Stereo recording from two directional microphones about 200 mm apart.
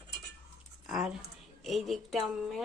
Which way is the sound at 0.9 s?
5° right (ahead or behind).